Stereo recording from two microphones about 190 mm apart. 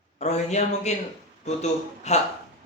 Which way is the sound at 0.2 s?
35° left (ahead or behind).